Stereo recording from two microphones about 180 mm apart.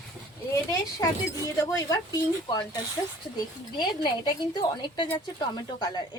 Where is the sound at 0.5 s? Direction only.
20° left (ahead or behind).